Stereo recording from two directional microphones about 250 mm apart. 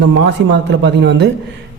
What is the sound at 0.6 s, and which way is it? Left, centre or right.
Speech, right.